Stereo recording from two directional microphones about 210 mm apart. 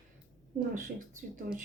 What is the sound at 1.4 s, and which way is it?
Speech, 40° right (ahead or behind).